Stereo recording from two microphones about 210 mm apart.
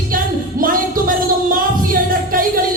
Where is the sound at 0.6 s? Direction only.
40° right (ahead or behind).